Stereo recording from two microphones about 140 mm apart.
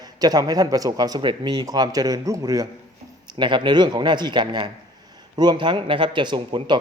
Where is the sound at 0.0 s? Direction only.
25° right (ahead or behind).